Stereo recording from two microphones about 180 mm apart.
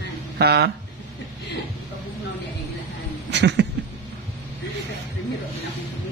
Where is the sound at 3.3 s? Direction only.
70° right (ahead or behind).